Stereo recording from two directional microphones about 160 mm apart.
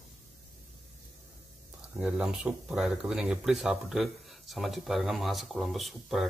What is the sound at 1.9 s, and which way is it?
Speech, 5° right (ahead or behind).